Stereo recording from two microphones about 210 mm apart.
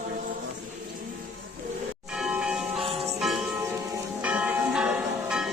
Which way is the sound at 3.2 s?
Centre (ahead or behind).